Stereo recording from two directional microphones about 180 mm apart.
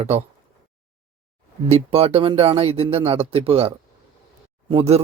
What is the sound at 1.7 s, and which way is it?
A man's voice, 35° right (ahead or behind).